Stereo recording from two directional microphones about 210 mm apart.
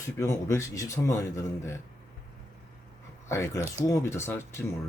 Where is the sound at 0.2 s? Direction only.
15° left (ahead or behind).